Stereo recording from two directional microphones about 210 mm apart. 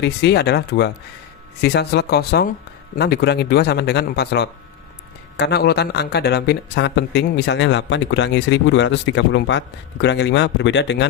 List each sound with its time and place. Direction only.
0.0 s speech: 50° left (ahead or behind)